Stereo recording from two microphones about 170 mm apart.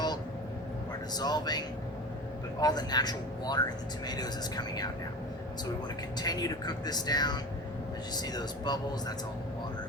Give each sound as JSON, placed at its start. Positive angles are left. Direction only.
{"t": 1.1, "sound": "speech", "side_deg": 25}
{"t": 6.1, "sound": "speech", "side_deg": 20}